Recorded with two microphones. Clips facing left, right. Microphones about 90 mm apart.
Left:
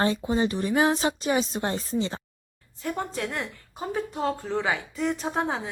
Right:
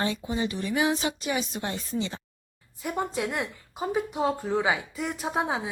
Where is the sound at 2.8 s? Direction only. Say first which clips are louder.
Right 1 dB; 15° right (ahead or behind).